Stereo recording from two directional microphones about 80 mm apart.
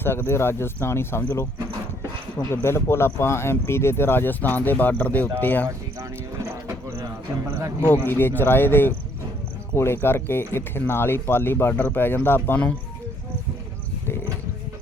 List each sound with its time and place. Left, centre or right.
0.0 s speech: left
2.5 s speech: left
6.0 s a sound: right
7.9 s speech: left